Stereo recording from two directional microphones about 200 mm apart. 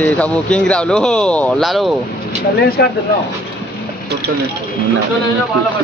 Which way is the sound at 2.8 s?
55° left (ahead or behind).